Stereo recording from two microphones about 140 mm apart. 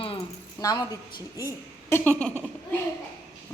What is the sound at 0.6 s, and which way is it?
A woman's voice, 25° left (ahead or behind).